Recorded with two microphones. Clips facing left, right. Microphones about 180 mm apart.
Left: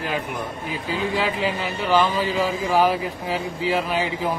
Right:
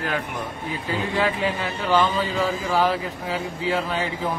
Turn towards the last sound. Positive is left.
turn(degrees=15)  # may be behind; listen again after turning